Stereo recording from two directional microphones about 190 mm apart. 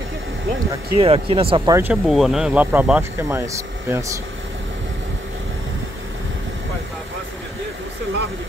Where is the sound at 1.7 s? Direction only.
10° right (ahead or behind).